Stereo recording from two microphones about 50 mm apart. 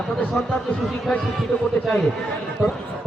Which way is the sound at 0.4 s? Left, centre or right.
Left.